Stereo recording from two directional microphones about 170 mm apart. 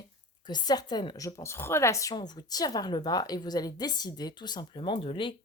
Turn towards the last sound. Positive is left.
turn(degrees=30)  # may be behind; listen again after turning